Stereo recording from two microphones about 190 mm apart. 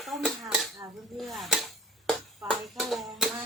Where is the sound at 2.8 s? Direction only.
Centre (ahead or behind).